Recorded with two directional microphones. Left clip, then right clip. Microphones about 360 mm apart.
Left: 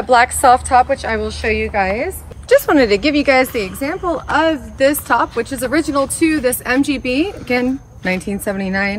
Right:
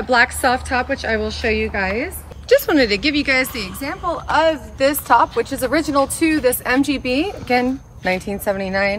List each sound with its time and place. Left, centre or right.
0.1 s a woman's voice: centre
4.1 s a woman's voice: centre